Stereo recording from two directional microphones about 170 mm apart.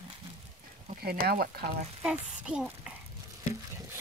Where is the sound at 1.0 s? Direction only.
60° right (ahead or behind).